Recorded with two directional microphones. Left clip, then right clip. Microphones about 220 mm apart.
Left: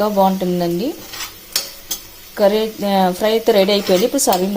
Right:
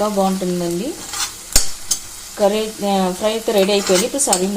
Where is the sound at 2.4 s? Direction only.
35° left (ahead or behind).